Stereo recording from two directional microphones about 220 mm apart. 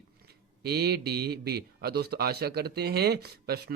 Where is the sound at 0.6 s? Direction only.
45° right (ahead or behind).